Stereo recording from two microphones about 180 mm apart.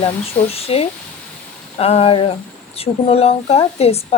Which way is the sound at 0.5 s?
35° left (ahead or behind).